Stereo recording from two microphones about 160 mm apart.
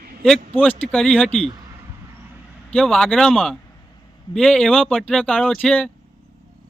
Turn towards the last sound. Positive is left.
turn(degrees=10)  # may be behind; listen again after turning